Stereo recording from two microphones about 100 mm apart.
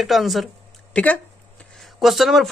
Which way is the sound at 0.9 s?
15° left (ahead or behind).